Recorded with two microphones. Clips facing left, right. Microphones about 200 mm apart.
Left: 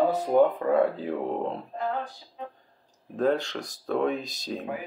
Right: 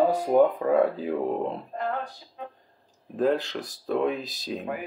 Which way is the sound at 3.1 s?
Centre (ahead or behind).